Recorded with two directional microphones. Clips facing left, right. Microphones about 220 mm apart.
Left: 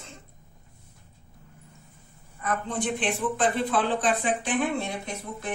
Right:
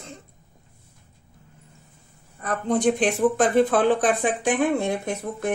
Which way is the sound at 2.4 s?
40° right (ahead or behind).